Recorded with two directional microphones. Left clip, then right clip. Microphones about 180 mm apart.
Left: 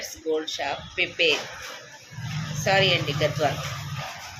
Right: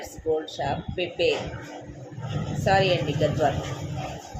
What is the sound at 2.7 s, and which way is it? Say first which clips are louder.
Speech: left 1 dB; 10° left (ahead or behind).